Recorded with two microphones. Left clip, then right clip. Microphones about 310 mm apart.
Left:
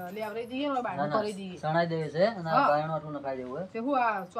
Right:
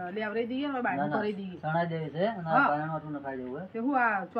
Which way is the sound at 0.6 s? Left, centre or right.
Left.